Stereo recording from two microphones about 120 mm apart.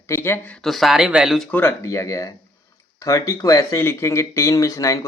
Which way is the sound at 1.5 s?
20° left (ahead or behind).